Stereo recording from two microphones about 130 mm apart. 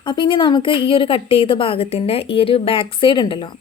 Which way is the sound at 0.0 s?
35° left (ahead or behind).